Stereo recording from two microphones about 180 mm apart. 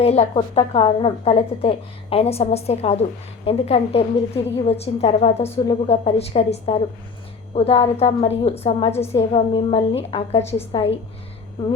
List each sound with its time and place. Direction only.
0.0 s a woman's voice: 35° left (ahead or behind)